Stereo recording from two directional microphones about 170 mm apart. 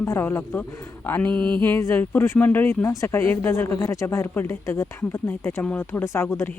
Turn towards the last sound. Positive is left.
turn(degrees=15)  # may be behind; listen again after turning